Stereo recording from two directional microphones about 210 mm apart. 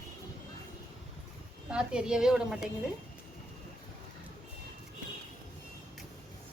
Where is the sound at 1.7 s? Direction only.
5° right (ahead or behind).